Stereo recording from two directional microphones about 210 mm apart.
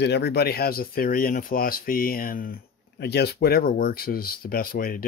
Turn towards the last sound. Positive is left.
turn(degrees=45)  # may be behind; listen again after turning